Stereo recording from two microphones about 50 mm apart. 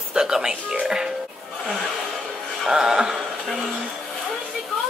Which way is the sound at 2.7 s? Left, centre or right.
Centre.